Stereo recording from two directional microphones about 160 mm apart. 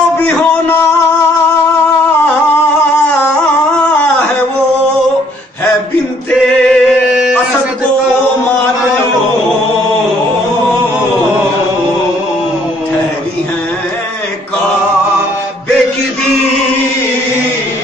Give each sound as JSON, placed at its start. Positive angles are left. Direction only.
{"t": 6.4, "sound": "music", "side_deg": 5}